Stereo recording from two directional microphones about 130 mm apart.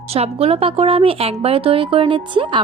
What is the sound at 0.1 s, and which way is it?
A woman's voice, 50° right (ahead or behind).